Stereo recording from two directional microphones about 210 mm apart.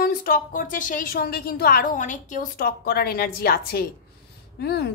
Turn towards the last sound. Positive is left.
turn(degrees=50)  # may be behind; listen again after turning